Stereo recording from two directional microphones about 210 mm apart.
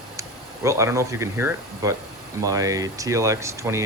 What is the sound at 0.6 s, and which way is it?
Speech, 15° right (ahead or behind).